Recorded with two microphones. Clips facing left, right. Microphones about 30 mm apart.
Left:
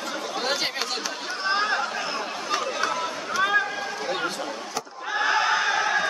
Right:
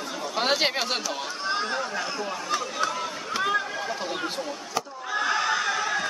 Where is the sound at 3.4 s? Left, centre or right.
Centre.